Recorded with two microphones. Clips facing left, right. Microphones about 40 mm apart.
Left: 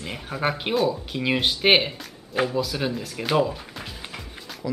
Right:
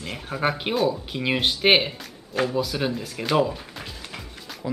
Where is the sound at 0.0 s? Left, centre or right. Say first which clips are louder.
Right 1 dB; centre.